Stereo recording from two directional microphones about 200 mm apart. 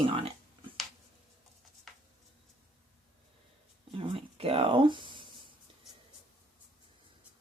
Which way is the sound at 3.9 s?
25° right (ahead or behind).